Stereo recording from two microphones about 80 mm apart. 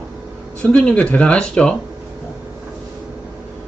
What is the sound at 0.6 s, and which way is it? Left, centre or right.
Speech, centre.